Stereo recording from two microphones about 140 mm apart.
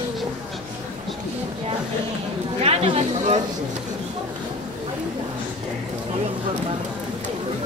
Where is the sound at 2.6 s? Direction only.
45° right (ahead or behind).